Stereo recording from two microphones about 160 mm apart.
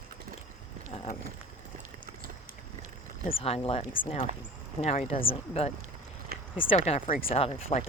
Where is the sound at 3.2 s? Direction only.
35° left (ahead or behind).